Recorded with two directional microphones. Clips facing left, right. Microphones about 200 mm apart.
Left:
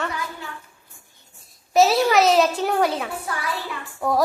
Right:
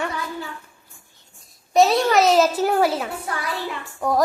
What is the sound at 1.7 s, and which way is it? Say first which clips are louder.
A child's voice: even; 5° left (ahead or behind).